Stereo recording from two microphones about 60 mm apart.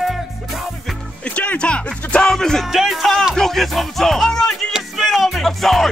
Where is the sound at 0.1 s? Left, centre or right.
Centre.